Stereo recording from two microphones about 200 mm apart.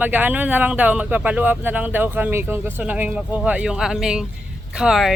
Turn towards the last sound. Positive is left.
turn(degrees=0)  # may be behind; listen again after turning